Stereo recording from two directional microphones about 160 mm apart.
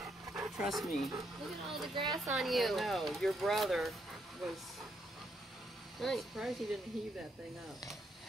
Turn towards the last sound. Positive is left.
turn(degrees=0)  # may be behind; listen again after turning